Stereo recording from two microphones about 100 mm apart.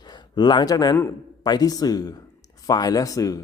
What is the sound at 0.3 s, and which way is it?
Speech, 45° left (ahead or behind).